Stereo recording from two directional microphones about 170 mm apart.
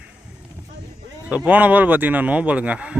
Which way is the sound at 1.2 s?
10° right (ahead or behind).